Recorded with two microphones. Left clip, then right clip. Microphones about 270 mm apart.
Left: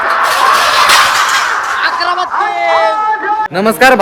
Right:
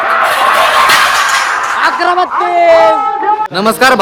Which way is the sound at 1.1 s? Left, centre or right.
Left.